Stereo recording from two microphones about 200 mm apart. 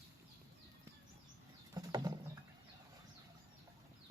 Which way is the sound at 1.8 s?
20° right (ahead or behind).